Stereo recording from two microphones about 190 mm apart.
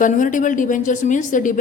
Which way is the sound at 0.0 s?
45° left (ahead or behind).